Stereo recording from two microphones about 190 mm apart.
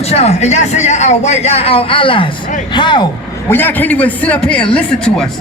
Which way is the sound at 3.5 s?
10° left (ahead or behind).